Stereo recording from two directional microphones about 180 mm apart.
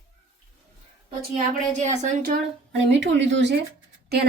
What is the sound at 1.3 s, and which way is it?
Speech, 40° right (ahead or behind).